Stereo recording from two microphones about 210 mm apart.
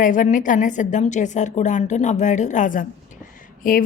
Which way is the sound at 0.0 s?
40° left (ahead or behind).